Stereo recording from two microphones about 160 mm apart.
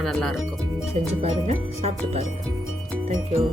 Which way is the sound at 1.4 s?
40° right (ahead or behind).